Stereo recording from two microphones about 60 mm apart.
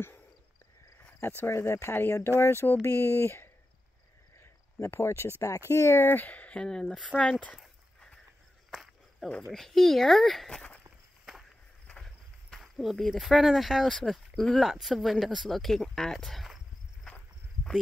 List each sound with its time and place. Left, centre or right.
1.2 s speech: left
2.8 s speech: left
6.2 s speech: left
6.6 s speech: centre
8.6 s a sound: centre
9.5 s speech: centre
12.0 s speech: centre